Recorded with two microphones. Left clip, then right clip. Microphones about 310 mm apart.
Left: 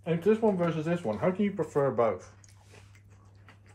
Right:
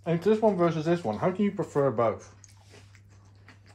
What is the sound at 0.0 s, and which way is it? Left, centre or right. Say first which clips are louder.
Speech: right 2 dB; right.